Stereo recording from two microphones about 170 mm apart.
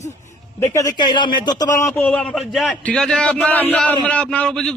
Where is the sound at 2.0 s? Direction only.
5° left (ahead or behind).